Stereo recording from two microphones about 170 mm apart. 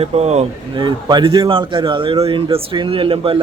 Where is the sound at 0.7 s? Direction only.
25° right (ahead or behind).